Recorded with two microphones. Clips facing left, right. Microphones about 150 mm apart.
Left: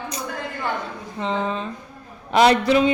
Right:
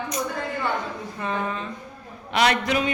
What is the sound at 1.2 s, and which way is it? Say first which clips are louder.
Speech: left 4 dB; 25° left (ahead or behind).